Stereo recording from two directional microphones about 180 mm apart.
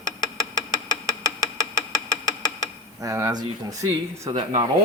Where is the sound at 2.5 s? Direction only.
20° right (ahead or behind).